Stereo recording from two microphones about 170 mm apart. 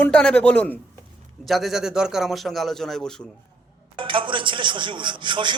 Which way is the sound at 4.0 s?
30° right (ahead or behind).